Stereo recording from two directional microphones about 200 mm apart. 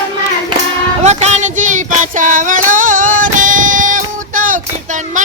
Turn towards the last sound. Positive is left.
turn(degrees=-40)  # may be behind; listen again after turning